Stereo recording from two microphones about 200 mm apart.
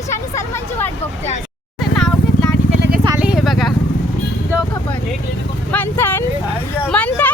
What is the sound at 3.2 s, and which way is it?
Vehicle, 5° right (ahead or behind).